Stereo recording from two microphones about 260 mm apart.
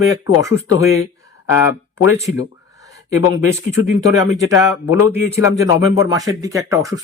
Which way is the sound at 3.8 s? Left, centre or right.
Left.